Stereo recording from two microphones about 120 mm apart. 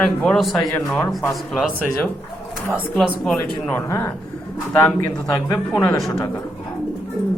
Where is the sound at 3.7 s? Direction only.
25° left (ahead or behind).